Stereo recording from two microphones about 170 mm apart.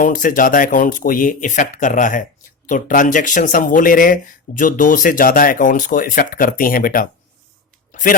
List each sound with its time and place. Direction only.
0.0 s speech: 50° left (ahead or behind)